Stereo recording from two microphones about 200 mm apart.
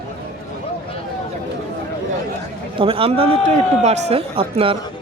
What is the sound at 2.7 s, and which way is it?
A man's voice, 25° right (ahead or behind).